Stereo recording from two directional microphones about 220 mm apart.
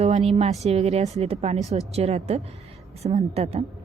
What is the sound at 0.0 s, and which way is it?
A woman's voice, 30° right (ahead or behind).